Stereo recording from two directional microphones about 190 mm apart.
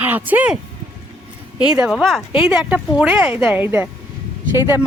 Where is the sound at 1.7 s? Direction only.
5° right (ahead or behind).